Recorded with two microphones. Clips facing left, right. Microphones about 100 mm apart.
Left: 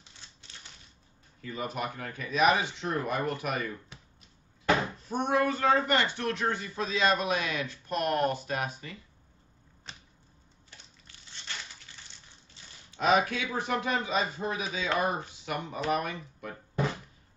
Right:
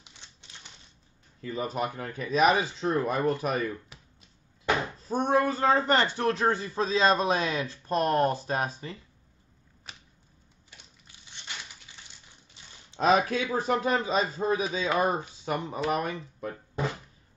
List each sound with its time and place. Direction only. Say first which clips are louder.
1.4 s a man's voice: right 4 dB; 35° right (ahead or behind)
5.0 s a man's voice: right 4 dB; 35° right (ahead or behind)
11.1 s crushing: even; 15° right (ahead or behind)
12.9 s a man's voice: right 2 dB; 35° right (ahead or behind)